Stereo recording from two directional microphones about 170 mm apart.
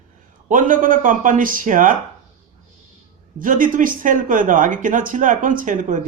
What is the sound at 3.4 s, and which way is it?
Speech, 50° right (ahead or behind).